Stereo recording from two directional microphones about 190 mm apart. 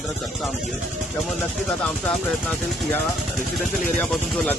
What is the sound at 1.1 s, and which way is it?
Speech, centre (ahead or behind).